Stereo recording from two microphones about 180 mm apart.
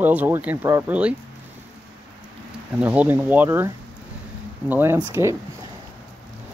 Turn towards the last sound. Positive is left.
turn(degrees=-15)  # may be behind; listen again after turning